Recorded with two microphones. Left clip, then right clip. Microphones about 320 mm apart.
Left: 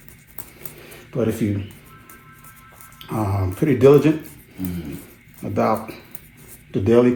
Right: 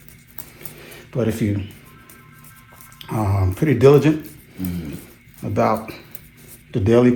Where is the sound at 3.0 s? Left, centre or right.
Right.